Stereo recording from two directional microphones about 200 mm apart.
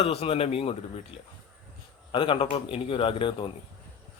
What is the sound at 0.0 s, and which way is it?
Speech, 30° left (ahead or behind).